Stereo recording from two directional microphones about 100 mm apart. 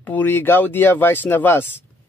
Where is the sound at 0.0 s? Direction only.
20° left (ahead or behind).